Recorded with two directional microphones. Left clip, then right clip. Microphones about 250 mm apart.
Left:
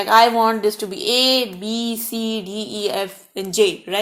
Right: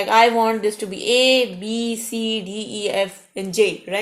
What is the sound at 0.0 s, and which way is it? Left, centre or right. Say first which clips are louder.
Speech: left 2 dB; left.